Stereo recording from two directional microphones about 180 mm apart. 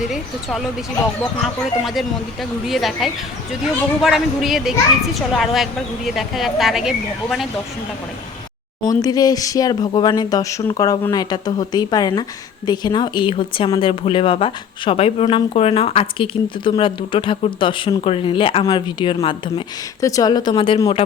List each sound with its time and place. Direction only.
0.0 s speech: centre (ahead or behind)
8.9 s speech: 20° left (ahead or behind)
20.0 s speech: 20° left (ahead or behind)